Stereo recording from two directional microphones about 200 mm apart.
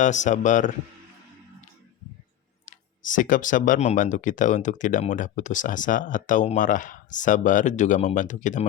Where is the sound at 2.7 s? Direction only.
40° left (ahead or behind).